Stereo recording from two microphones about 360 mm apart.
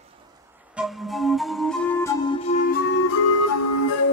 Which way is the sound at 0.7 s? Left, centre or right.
Centre.